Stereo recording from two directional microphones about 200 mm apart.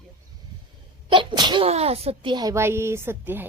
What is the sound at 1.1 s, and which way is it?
Speech, 25° right (ahead or behind).